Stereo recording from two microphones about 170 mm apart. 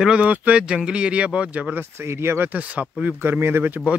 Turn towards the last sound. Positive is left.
turn(degrees=-10)  # may be behind; listen again after turning